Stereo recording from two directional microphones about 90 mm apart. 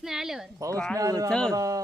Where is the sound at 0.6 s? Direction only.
35° right (ahead or behind).